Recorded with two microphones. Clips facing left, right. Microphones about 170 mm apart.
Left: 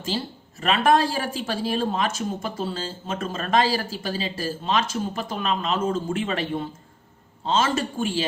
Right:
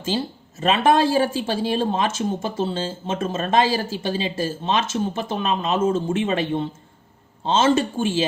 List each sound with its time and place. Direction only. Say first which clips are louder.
0.6 s speech: right 2 dB; 25° right (ahead or behind)